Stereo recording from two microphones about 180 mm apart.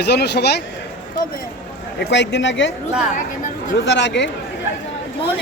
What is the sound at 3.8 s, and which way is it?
Speech, 75° left (ahead or behind).